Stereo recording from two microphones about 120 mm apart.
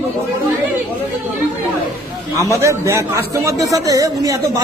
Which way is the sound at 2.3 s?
25° right (ahead or behind).